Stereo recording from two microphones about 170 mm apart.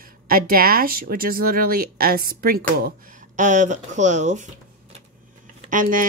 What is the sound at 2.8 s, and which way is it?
A woman's voice, 50° right (ahead or behind).